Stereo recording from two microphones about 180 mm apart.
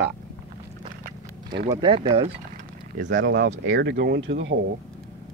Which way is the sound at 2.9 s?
80° right.